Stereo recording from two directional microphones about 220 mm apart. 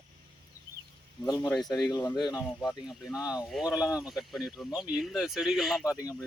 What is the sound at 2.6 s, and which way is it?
Speech, centre (ahead or behind).